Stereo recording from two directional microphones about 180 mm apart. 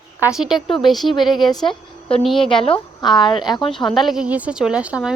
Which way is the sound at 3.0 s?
25° left (ahead or behind).